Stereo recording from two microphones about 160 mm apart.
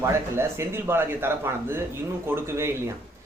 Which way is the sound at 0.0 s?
15° right (ahead or behind).